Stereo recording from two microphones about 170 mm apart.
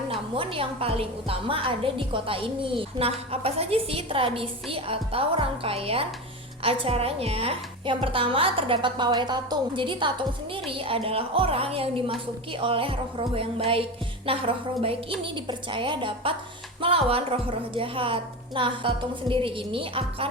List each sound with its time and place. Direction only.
0.1 s a woman's voice: 30° right (ahead or behind)